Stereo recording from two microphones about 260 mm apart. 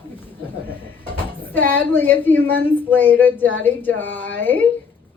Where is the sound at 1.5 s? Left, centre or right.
Centre.